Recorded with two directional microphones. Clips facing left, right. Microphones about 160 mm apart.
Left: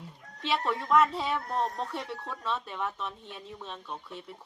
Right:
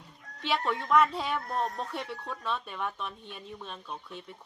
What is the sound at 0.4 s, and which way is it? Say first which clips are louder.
Speech: even; centre (ahead or behind).